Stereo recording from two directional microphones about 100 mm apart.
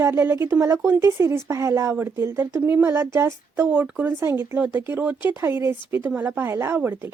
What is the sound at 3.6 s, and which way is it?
A woman's voice, 15° right (ahead or behind).